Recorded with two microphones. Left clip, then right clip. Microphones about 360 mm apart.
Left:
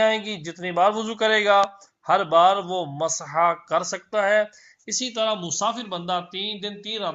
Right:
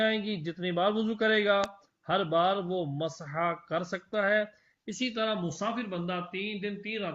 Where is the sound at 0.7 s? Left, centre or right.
Left.